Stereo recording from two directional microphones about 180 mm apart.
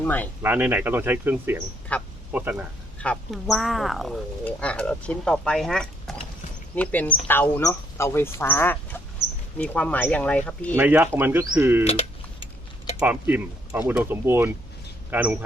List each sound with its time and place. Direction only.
0.0 s speech: 10° left (ahead or behind)
0.4 s speech: 10° right (ahead or behind)
1.9 s speech: 10° left (ahead or behind)
2.3 s speech: 10° right (ahead or behind)
3.0 s speech: 5° left (ahead or behind)
9.2 s a sound: 90° right
9.6 s speech: 5° left (ahead or behind)
10.8 s speech: 10° right (ahead or behind)
11.9 s a sound: 35° left (ahead or behind)
13.0 s speech: 10° right (ahead or behind)